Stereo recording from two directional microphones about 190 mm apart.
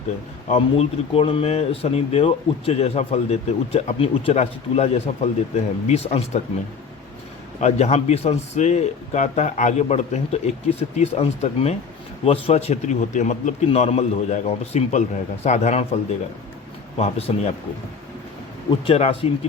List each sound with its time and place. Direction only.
0.4 s speech: 35° left (ahead or behind)
7.6 s speech: 35° left (ahead or behind)
17.0 s speech: 30° left (ahead or behind)
18.9 s speech: 35° left (ahead or behind)